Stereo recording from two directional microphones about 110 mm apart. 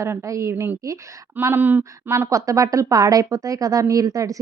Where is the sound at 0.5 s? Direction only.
15° right (ahead or behind).